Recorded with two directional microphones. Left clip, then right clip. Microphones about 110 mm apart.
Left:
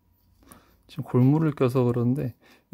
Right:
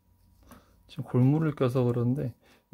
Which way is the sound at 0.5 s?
40° left (ahead or behind).